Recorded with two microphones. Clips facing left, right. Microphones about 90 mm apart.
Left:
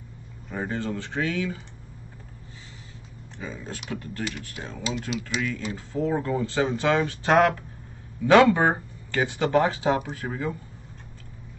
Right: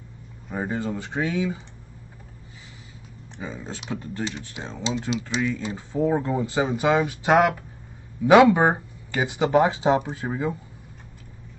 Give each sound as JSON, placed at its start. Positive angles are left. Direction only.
{"t": 0.5, "sound": "speech", "side_deg": -15}
{"t": 3.3, "sound": "speech", "side_deg": -20}